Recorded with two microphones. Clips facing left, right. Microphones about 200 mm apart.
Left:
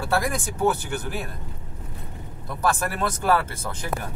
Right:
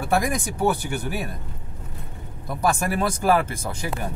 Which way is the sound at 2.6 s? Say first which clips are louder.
Right 2 dB; 15° right (ahead or behind).